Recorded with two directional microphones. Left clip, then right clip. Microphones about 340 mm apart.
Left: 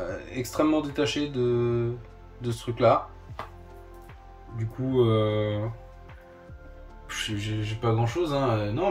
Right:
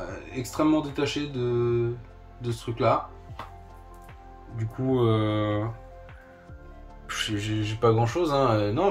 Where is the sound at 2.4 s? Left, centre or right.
Centre.